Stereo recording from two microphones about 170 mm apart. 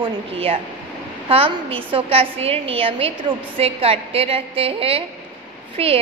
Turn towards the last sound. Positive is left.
turn(degrees=-35)  # may be behind; listen again after turning